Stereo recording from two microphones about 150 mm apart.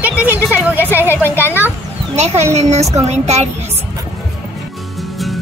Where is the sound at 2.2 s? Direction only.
45° right (ahead or behind).